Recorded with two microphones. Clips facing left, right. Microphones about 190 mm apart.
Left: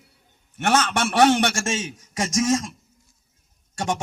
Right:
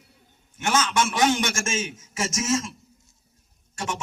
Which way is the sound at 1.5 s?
35° left (ahead or behind).